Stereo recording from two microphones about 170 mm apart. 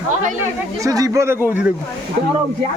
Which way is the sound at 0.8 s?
20° right (ahead or behind).